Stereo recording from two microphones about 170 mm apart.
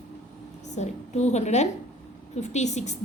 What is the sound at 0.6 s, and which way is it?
A woman's voice, 40° left (ahead or behind).